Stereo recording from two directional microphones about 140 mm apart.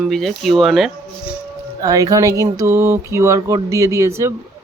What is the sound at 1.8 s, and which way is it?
Speech, 25° right (ahead or behind).